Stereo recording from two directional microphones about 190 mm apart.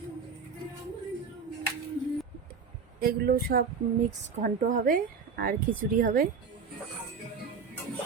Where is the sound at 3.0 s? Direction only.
55° right (ahead or behind).